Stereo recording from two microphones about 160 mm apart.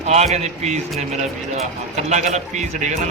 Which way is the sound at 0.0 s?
45° right (ahead or behind).